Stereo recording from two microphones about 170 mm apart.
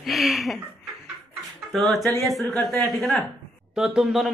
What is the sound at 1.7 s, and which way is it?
Speech, centre (ahead or behind).